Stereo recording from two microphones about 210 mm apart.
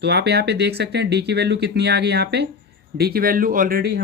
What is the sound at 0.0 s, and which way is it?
Speech, 50° right (ahead or behind).